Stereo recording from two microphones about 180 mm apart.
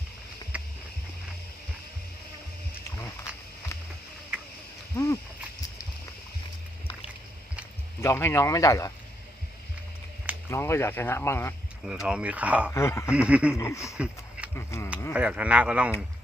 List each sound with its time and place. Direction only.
0.5 s music: 5° right (ahead or behind)
4.9 s a sound: 15° left (ahead or behind)
8.0 s speech: 15° left (ahead or behind)
10.5 s speech: 15° left (ahead or behind)
11.9 s speech: 5° right (ahead or behind)
12.7 s speech: 15° left (ahead or behind)
13.1 s speech: 5° right (ahead or behind)
13.5 s speech: 15° left (ahead or behind)
13.9 s a sound: 5° right (ahead or behind)
14.5 s speech: 15° left (ahead or behind)
15.1 s speech: 5° right (ahead or behind)